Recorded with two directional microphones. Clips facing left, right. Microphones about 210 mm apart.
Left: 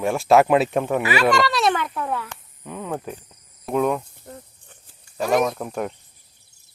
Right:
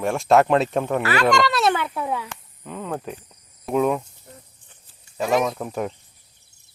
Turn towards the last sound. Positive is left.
turn(degrees=0)  # may be behind; listen again after turning